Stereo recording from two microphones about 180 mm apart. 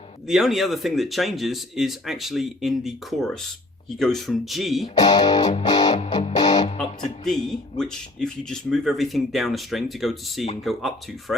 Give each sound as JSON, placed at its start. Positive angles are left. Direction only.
{"t": 0.3, "sound": "speech", "side_deg": 0}
{"t": 4.9, "sound": "music", "side_deg": 20}
{"t": 5.9, "sound": "music", "side_deg": 40}
{"t": 6.2, "sound": "music", "side_deg": 20}
{"t": 7.4, "sound": "speech", "side_deg": 5}